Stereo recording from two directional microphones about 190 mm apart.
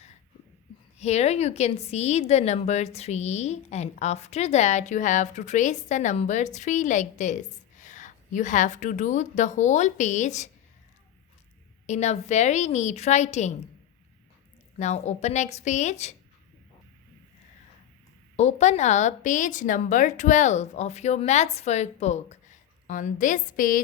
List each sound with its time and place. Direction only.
0.9 s a woman's voice: 35° left (ahead or behind)
11.9 s a woman's voice: 35° left (ahead or behind)
14.8 s a woman's voice: 35° left (ahead or behind)
18.3 s a woman's voice: 35° left (ahead or behind)